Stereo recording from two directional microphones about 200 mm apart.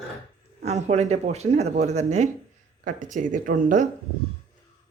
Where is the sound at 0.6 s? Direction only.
35° right (ahead or behind).